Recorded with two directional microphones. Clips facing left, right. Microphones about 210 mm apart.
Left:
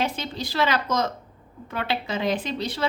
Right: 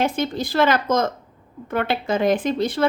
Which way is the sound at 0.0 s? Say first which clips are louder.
Right 6 dB; 50° right (ahead or behind).